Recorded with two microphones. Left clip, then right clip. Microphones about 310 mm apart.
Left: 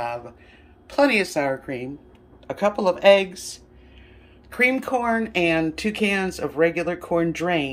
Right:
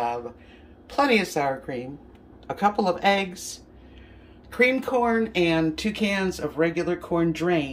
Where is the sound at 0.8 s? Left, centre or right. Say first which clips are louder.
Left 2 dB; centre.